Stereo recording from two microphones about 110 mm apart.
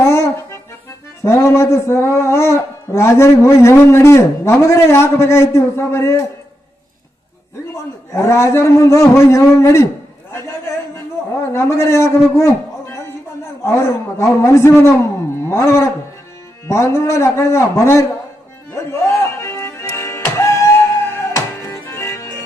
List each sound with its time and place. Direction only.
0.0 s accordion: 25° left (ahead or behind)
1.2 s speech: 25° left (ahead or behind)
7.7 s a man's voice: 25° left (ahead or behind)
11.5 s speech: 25° left (ahead or behind)
18.7 s music: 25° left (ahead or behind)